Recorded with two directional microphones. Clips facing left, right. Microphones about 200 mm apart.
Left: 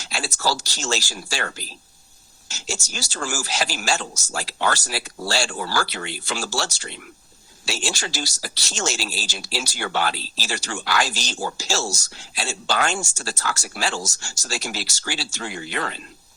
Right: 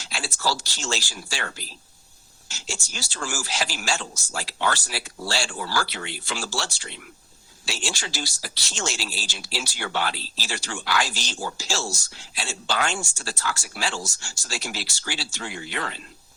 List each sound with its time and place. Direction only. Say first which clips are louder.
0.0 s speech: left 3 dB; 40° left (ahead or behind)